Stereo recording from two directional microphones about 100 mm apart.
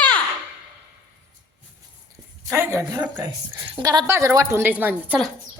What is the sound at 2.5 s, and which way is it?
Speech, 25° right (ahead or behind).